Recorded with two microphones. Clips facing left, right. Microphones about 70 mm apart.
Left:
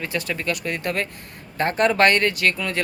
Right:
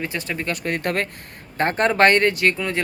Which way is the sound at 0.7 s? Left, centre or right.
Right.